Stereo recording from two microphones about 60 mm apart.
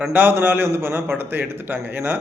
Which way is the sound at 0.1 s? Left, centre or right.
Right.